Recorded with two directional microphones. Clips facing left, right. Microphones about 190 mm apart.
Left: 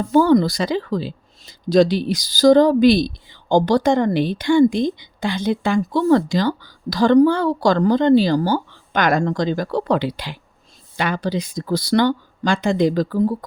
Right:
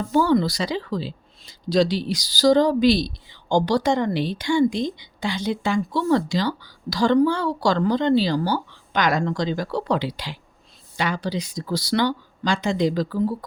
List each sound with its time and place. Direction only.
0.1 s speech: 50° left (ahead or behind)